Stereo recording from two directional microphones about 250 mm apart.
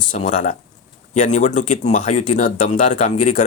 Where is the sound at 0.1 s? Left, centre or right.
Left.